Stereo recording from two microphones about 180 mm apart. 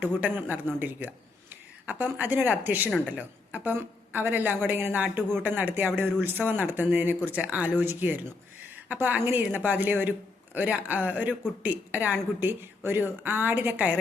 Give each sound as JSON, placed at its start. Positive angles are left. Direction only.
{"t": 0.2, "sound": "speech", "side_deg": -10}